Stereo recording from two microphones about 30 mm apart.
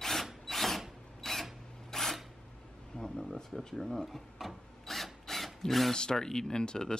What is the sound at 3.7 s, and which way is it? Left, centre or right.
Speech, centre.